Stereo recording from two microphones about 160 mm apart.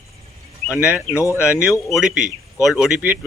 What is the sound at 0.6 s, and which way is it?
Speech, 10° right (ahead or behind).